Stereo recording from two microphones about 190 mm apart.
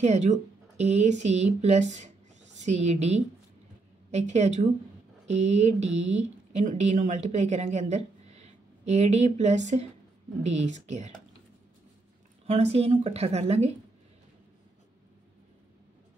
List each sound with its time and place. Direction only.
0.0 s speech: 35° right (ahead or behind)
12.4 s speech: 35° right (ahead or behind)